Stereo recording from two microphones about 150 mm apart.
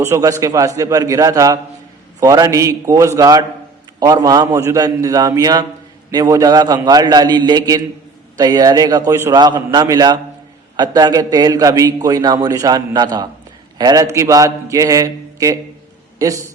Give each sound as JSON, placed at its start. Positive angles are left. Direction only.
{"t": 0.0, "sound": "a man's voice", "side_deg": -20}